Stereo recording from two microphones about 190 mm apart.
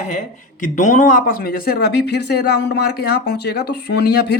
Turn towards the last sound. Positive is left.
turn(degrees=60)  # may be behind; listen again after turning